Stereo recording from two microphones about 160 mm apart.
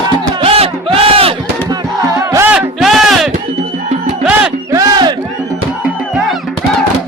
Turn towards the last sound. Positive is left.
turn(degrees=-25)  # may be behind; listen again after turning